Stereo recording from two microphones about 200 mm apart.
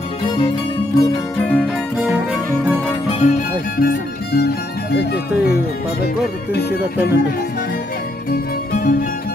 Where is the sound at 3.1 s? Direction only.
30° left (ahead or behind); by 5.2 s 55° left (ahead or behind).